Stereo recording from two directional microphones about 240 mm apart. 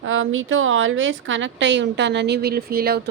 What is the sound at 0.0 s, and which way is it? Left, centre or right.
Speech, right.